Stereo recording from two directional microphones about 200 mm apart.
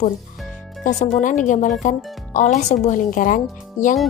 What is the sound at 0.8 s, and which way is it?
Speech, 40° left (ahead or behind).